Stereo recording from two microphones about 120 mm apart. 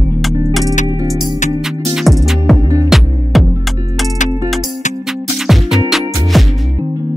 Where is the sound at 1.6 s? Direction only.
5° right (ahead or behind).